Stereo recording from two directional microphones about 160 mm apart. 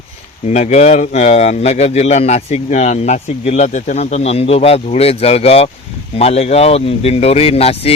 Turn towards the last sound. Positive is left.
turn(degrees=40)  # may be behind; listen again after turning